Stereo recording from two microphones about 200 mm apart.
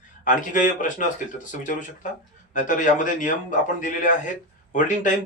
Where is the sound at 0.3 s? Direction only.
40° left (ahead or behind).